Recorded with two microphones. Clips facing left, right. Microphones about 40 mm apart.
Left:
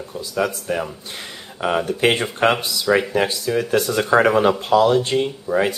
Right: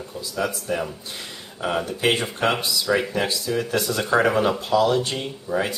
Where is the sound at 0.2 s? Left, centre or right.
Left.